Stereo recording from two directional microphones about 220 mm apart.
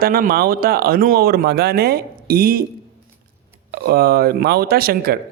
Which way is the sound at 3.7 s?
45° right (ahead or behind).